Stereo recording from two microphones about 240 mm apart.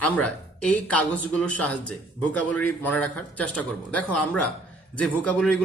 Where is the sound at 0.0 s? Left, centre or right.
Centre.